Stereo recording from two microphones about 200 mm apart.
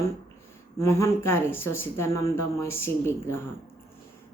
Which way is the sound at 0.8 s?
15° left (ahead or behind).